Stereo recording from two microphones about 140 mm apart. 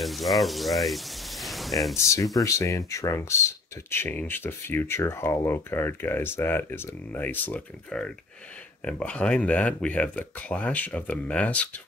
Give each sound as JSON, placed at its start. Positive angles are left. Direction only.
{"t": 0.0, "sound": "speech", "side_deg": 0}
{"t": 2.0, "sound": "speech", "side_deg": 20}